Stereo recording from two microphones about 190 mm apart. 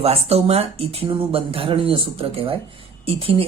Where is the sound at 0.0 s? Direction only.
35° right (ahead or behind).